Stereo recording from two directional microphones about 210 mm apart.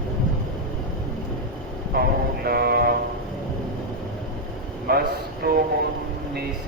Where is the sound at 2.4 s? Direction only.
50° right (ahead or behind).